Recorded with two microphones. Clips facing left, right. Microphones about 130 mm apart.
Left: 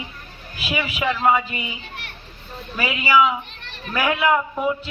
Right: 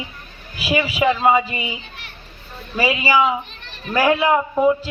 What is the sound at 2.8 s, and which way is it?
A man's voice, 30° right (ahead or behind).